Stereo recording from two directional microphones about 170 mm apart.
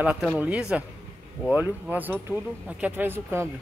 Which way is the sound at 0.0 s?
10° right (ahead or behind).